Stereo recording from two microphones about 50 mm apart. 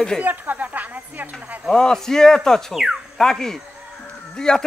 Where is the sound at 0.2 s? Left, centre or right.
Right.